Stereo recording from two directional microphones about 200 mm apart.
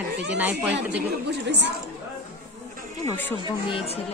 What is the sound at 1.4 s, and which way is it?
Speech, 60° right (ahead or behind).